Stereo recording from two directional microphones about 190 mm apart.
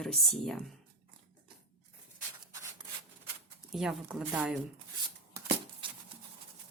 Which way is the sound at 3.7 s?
Centre (ahead or behind).